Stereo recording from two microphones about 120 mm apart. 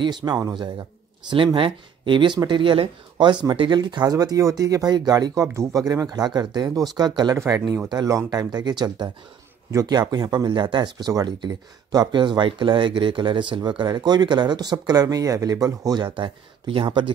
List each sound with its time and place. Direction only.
0.0 s speech: 35° right (ahead or behind)
7.3 s speech: 25° right (ahead or behind); by 17.0 s 45° right (ahead or behind)